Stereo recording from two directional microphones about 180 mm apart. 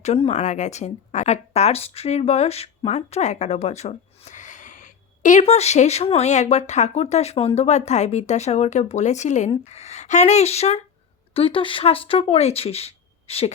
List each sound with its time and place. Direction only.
0.0 s speech: 40° left (ahead or behind)